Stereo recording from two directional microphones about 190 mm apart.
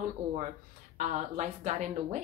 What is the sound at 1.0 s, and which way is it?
Speech, 40° right (ahead or behind).